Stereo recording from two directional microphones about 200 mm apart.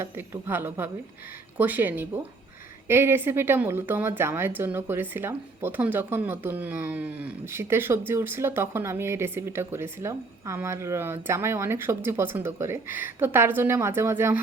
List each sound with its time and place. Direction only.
0.0 s speech: 10° right (ahead or behind)